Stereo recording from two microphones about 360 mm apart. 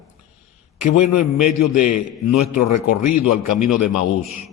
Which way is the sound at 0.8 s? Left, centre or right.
Left.